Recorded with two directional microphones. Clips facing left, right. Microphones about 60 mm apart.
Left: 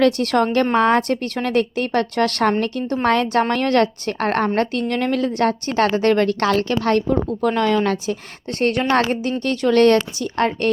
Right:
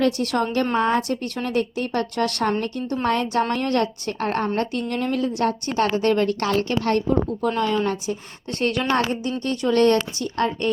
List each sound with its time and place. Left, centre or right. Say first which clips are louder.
0.0 s a woman's voice: left 5 dB; left
0.5 s a woman's voice: left 4 dB; left
0.8 s a woman's voice: left 5 dB; left
3.0 s speech: left 4 dB; left
3.5 s a woman's voice: left 5 dB; left
4.5 s a woman's voice: left 4 dB; left
7.1 s a woman's voice: left 2 dB; left
8.5 s a woman's voice: left 4 dB; left
9.0 s a woman's voice: left 4 dB; left